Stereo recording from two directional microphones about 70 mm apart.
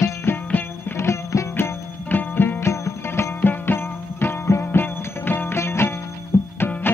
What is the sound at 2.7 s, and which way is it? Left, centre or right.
Music, left.